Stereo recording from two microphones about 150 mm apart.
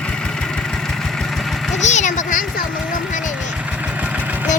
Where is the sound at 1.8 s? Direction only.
50° left (ahead or behind).